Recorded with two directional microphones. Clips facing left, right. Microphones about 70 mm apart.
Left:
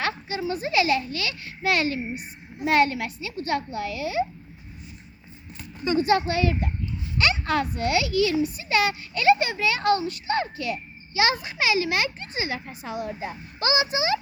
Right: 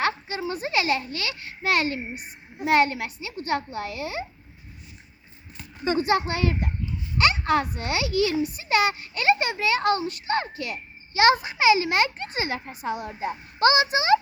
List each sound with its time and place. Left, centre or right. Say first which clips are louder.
0.0 s a sound: right 1 dB; right
2.6 s a child's voice: even; right
5.8 s a child's voice: left 1 dB; right
11.5 s a child's voice: right 4 dB; right